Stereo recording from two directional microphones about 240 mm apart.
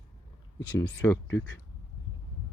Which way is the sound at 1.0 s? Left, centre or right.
Centre.